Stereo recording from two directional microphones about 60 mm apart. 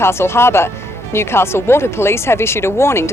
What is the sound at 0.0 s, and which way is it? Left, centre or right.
Speech, left.